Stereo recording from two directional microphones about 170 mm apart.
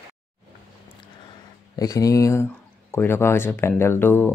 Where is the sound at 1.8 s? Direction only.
20° left (ahead or behind).